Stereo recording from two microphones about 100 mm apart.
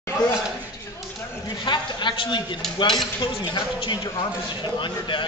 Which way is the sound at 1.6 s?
50° left (ahead or behind).